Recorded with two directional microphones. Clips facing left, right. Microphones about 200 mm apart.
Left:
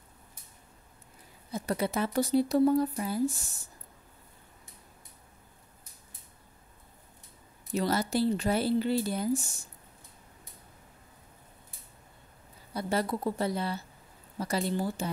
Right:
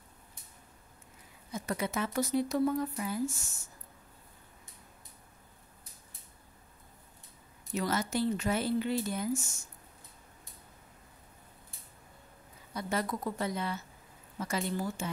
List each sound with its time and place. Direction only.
1.5 s speech: 35° left (ahead or behind)
7.7 s speech: 35° left (ahead or behind)
12.7 s speech: 30° left (ahead or behind)